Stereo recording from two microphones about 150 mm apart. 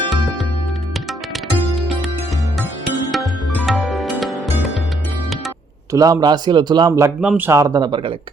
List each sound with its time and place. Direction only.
3.7 s music: centre (ahead or behind)
5.9 s a man's voice: 25° right (ahead or behind)
7.2 s a man's voice: 10° right (ahead or behind); by 8.1 s 30° right (ahead or behind)